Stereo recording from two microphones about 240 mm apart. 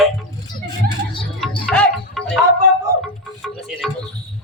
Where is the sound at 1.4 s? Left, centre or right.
Centre.